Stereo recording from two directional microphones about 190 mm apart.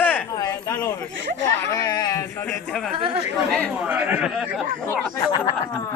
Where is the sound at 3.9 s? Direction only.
10° right (ahead or behind).